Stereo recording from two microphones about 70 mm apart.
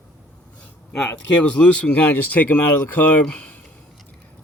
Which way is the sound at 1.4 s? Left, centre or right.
Centre.